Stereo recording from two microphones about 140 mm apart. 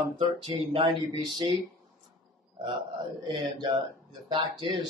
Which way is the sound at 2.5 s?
30° right (ahead or behind).